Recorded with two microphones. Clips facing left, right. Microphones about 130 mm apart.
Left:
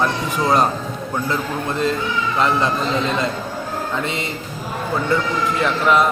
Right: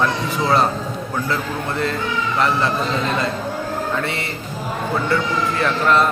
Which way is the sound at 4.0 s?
20° left (ahead or behind).